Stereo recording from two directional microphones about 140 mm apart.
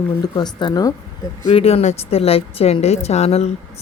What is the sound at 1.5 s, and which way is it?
Speech, 45° left (ahead or behind).